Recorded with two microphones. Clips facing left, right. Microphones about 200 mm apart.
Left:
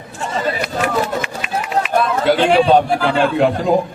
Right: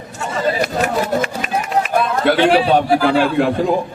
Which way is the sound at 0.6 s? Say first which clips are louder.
Right 1 dB; 45° right (ahead or behind).